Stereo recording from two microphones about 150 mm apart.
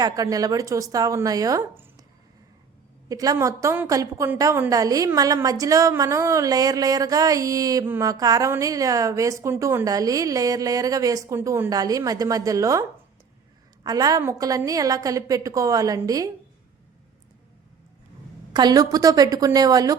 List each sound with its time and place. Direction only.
0.0 s a woman's voice: 25° right (ahead or behind)
3.1 s a woman's voice: 25° right (ahead or behind)
13.8 s a woman's voice: 25° right (ahead or behind)
18.5 s a woman's voice: 25° right (ahead or behind)